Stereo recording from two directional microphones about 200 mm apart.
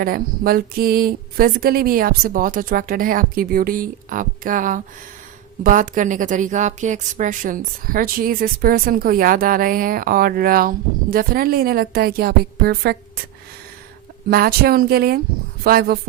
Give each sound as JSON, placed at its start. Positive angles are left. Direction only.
{"t": 0.0, "sound": "a woman's voice", "side_deg": -45}
{"t": 14.3, "sound": "a woman's voice", "side_deg": -50}